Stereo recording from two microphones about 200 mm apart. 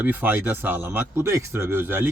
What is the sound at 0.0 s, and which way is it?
Speech, 10° right (ahead or behind).